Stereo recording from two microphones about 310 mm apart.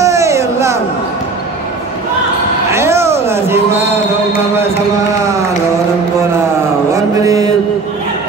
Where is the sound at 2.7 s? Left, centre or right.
Centre.